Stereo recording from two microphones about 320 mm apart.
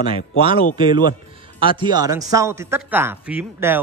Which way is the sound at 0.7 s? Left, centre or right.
Centre.